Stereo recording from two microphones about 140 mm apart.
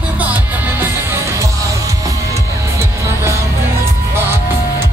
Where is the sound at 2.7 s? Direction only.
20° right (ahead or behind).